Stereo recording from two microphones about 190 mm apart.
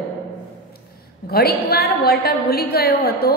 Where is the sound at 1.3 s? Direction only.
55° left (ahead or behind).